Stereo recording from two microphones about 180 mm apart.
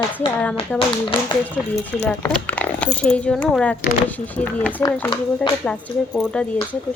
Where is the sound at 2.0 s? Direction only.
10° left (ahead or behind).